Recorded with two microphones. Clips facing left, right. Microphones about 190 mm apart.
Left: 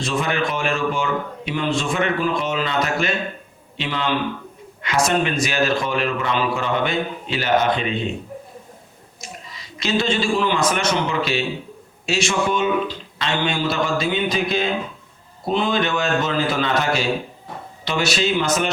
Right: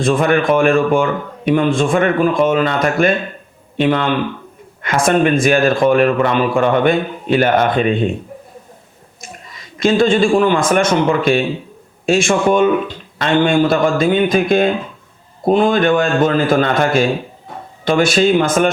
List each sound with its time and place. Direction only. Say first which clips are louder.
0.0 s a man's voice: right 8 dB; 50° right (ahead or behind)
9.2 s a man's voice: right 2 dB; 50° right (ahead or behind)